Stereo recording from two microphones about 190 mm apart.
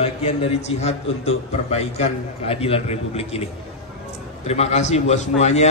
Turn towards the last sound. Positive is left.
turn(degrees=35)  # may be behind; listen again after turning